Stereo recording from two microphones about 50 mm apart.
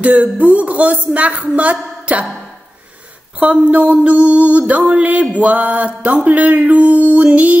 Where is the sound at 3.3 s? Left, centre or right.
Right.